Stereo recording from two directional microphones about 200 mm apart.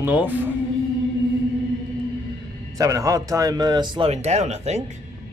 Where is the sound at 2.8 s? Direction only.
15° right (ahead or behind); by 4.8 s 35° right (ahead or behind).